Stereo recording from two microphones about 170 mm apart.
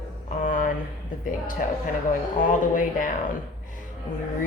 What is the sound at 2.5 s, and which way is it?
Speech, 50° left (ahead or behind).